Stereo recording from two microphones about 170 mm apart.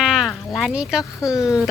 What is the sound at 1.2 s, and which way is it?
Speech, 20° left (ahead or behind).